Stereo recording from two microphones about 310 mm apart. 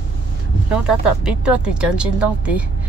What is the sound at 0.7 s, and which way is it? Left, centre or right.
Speech, centre.